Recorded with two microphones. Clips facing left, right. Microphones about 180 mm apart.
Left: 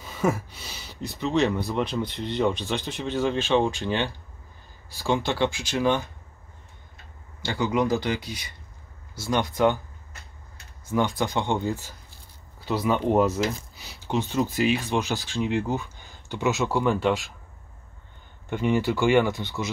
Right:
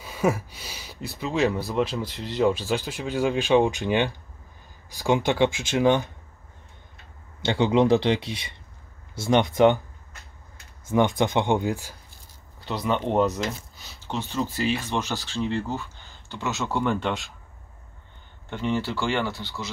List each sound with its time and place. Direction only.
0.0 s speech: 10° right (ahead or behind)
7.4 s speech: 25° right (ahead or behind)
10.9 s speech: 20° right (ahead or behind)
12.5 s speech: 5° left (ahead or behind)
13.7 s speech: 15° left (ahead or behind)
16.7 s speech: 5° left (ahead or behind)
18.5 s speech: 15° left (ahead or behind)